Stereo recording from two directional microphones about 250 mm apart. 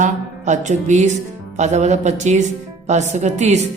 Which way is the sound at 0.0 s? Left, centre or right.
Right.